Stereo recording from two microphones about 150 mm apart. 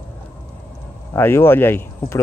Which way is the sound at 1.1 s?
15° left (ahead or behind).